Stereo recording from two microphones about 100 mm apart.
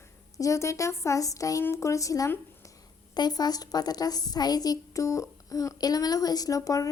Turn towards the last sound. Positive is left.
turn(degrees=35)  # may be behind; listen again after turning